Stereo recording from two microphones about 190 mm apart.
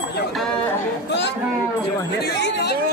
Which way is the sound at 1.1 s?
65° left (ahead or behind).